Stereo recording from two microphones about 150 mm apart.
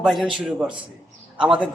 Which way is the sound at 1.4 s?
10° right (ahead or behind).